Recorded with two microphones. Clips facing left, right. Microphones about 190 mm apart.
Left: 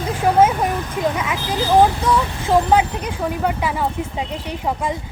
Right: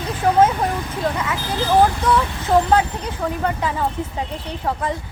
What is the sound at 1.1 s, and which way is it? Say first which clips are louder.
Speech: left 1 dB; 15° left (ahead or behind).